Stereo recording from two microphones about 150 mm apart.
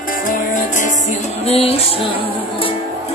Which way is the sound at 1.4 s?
40° left (ahead or behind).